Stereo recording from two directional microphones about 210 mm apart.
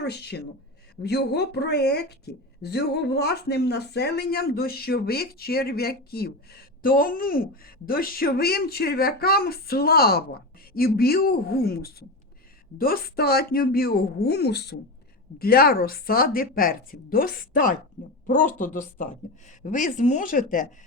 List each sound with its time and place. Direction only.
0.0 s speech: 50° left (ahead or behind)